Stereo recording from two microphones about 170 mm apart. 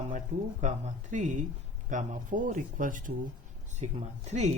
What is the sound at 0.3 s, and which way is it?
Speech, 40° right (ahead or behind).